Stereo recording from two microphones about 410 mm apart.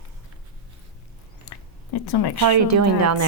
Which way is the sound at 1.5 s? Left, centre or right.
Left.